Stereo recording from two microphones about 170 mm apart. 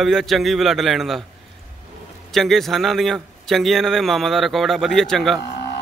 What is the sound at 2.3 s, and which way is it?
Speech, centre (ahead or behind).